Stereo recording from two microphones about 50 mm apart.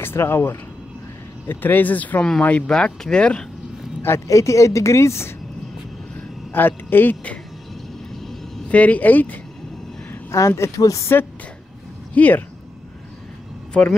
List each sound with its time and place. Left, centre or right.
0.0 s speech: left
2.7 s speech: centre
4.3 s speech: left
6.5 s speech: left
8.2 s vehicle: centre
8.6 s speech: left
10.3 s speech: left
12.1 s speech: left
13.7 s speech: left